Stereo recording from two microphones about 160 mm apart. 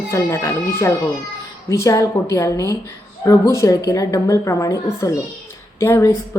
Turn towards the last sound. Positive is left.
turn(degrees=15)  # may be behind; listen again after turning